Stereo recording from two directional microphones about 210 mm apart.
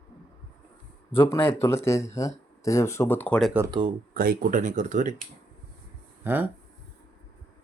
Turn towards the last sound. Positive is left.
turn(degrees=-10)  # may be behind; listen again after turning